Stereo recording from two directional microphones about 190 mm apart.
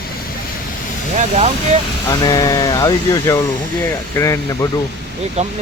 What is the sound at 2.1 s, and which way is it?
Speech, 20° left (ahead or behind).